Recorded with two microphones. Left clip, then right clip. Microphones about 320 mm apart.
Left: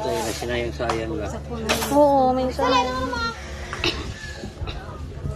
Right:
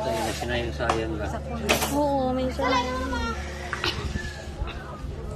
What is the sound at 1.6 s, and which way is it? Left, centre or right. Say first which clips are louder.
Speech: even; right.